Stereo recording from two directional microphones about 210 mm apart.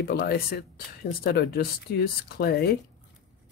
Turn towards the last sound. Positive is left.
turn(degrees=50)  # may be behind; listen again after turning